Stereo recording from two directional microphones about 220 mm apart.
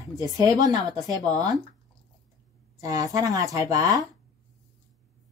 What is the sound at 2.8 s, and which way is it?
A woman's voice, 15° right (ahead or behind).